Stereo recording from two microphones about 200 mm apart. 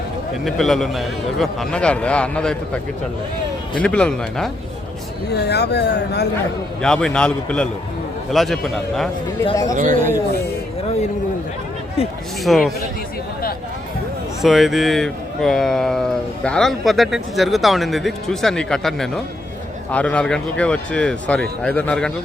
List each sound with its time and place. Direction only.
0.4 s speech: centre (ahead or behind)
5.3 s speech: 55° left (ahead or behind)
6.8 s speech: 5° left (ahead or behind)
9.5 s speech: 15° left (ahead or behind)
9.7 s speech: 40° right (ahead or behind)
12.0 s speech: 30° left (ahead or behind)
12.4 s speech: centre (ahead or behind)
14.4 s speech: centre (ahead or behind)